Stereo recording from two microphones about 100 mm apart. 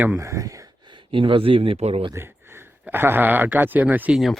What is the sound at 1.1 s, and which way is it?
Speech, 60° right (ahead or behind).